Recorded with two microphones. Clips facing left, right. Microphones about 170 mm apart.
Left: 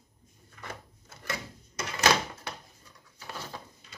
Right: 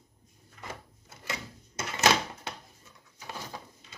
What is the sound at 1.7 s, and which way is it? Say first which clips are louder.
Door: even; 25° right (ahead or behind).